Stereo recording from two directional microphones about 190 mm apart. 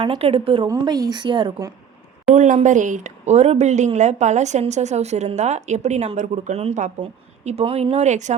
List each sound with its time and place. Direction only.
0.0 s speech: 30° right (ahead or behind)
2.3 s a woman's voice: 40° right (ahead or behind)